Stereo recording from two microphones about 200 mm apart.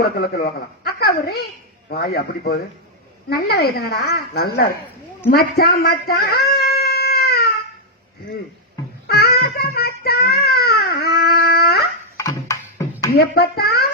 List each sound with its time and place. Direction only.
0.0 s a woman's voice: 50° left (ahead or behind)
6.5 s music: 50° left (ahead or behind)
9.0 s child singing: 50° left (ahead or behind)
12.1 s beatboxing: 15° left (ahead or behind)
13.1 s a child's voice: 50° left (ahead or behind)